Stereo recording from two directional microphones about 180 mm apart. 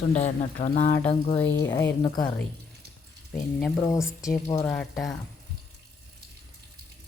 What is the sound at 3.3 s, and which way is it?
Speech, centre (ahead or behind).